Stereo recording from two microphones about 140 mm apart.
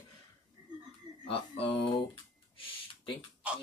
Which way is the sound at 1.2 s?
40° left (ahead or behind).